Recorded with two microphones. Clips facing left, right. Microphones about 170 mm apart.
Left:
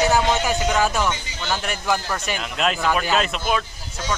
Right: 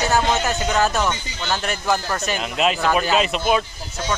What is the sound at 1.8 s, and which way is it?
Speech, 5° right (ahead or behind).